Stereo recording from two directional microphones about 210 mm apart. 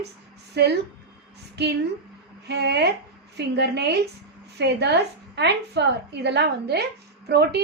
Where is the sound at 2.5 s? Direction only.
55° right (ahead or behind).